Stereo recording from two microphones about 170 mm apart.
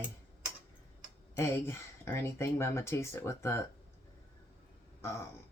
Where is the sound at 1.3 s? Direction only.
15° left (ahead or behind).